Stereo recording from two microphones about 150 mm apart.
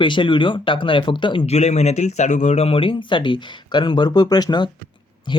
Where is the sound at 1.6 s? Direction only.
45° left (ahead or behind).